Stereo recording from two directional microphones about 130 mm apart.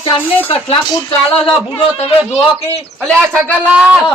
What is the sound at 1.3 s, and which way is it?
A man's voice, 45° left (ahead or behind).